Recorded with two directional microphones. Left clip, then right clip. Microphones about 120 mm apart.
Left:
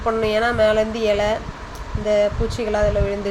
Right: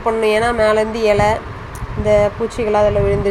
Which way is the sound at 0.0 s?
15° right (ahead or behind).